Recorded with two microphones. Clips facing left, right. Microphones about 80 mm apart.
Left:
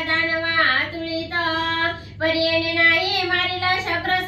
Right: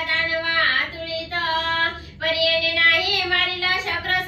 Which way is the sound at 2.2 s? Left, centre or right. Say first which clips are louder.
Left 2 dB; left.